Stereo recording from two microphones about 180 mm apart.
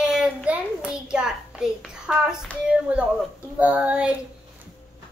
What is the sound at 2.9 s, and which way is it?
Child singing, 5° right (ahead or behind).